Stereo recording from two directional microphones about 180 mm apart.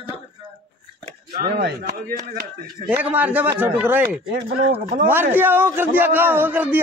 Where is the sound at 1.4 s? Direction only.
55° right (ahead or behind).